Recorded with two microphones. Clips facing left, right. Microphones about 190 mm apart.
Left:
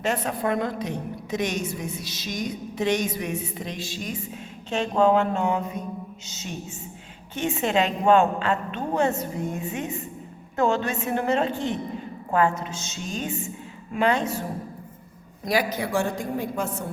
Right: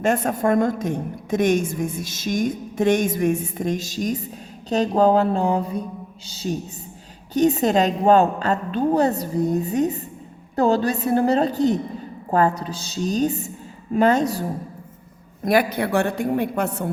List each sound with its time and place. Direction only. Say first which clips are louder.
0.0 s a woman's voice: right 5 dB; 50° right (ahead or behind)
15.4 s a woman's voice: right 5 dB; 60° right (ahead or behind)